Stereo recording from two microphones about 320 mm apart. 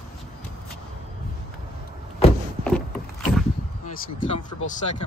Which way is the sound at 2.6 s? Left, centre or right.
Centre.